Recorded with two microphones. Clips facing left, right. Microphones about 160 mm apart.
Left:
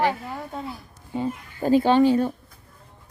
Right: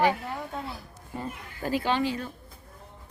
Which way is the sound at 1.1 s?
25° left (ahead or behind).